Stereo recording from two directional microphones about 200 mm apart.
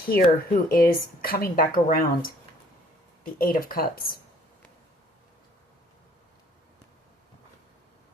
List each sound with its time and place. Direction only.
0.1 s speech: 45° left (ahead or behind)